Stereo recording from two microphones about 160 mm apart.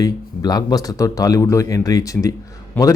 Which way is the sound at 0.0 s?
25° left (ahead or behind).